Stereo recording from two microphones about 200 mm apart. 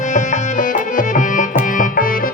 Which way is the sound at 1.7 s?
45° left (ahead or behind).